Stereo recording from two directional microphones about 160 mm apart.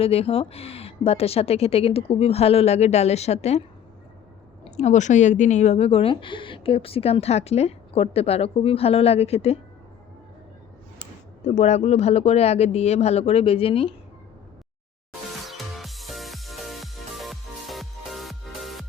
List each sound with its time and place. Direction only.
0.0 s a woman's voice: 40° left (ahead or behind)
4.6 s a woman's voice: 45° left (ahead or behind)
11.4 s a woman's voice: 45° left (ahead or behind)
15.4 s music: centre (ahead or behind)